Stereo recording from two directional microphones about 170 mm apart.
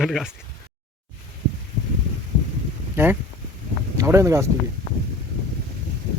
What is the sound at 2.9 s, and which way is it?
Speech, 15° right (ahead or behind).